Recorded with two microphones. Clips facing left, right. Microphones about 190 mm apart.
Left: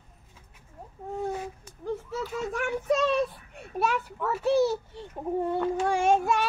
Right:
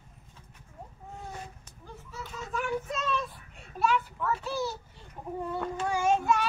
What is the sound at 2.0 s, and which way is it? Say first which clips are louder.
Children playing: left 10 dB; 75° left (ahead or behind).